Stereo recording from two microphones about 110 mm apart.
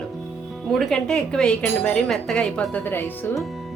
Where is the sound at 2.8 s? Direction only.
20° left (ahead or behind).